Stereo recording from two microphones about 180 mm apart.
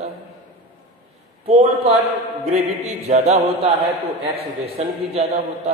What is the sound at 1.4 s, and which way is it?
A man's voice, 30° right (ahead or behind).